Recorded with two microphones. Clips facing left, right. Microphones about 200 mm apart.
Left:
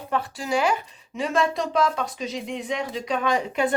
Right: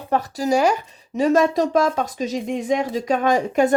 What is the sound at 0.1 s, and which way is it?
A woman's voice, 40° right (ahead or behind).